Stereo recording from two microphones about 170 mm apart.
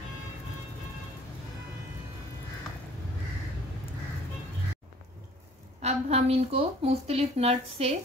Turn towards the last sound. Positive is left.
turn(degrees=-35)  # may be behind; listen again after turning